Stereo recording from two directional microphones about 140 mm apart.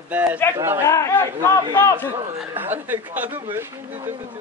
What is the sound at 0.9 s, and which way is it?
Speech, 20° left (ahead or behind).